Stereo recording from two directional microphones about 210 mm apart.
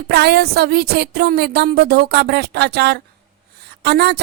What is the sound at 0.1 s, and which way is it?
A woman's voice, 50° right (ahead or behind).